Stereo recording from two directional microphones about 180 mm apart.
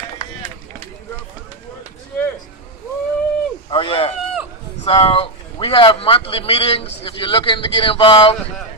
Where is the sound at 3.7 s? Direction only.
30° left (ahead or behind).